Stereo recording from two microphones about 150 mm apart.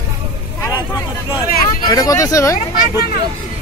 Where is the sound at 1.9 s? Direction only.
25° left (ahead or behind).